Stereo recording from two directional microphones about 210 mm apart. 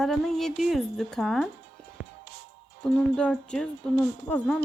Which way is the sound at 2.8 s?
5° left (ahead or behind).